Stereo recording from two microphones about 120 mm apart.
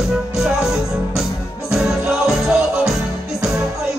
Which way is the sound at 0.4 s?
5° right (ahead or behind).